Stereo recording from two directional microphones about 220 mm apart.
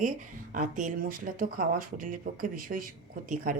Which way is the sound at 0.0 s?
35° right (ahead or behind).